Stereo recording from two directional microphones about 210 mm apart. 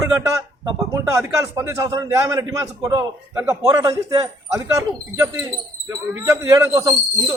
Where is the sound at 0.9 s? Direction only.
15° right (ahead or behind).